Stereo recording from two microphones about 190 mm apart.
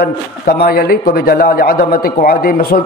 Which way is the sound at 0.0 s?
55° left (ahead or behind).